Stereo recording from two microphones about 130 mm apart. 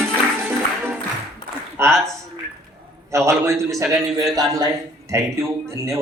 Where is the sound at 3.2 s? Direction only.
20° right (ahead or behind).